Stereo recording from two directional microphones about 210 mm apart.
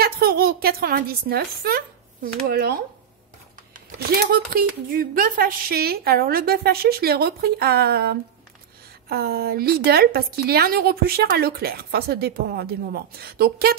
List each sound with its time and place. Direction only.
0.0 s a woman's voice: 45° right (ahead or behind)
4.1 s a woman's voice: 45° right (ahead or behind)